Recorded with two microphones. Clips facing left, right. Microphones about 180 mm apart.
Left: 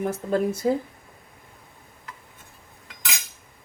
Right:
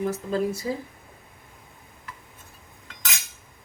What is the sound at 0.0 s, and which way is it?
Speech, 60° left (ahead or behind).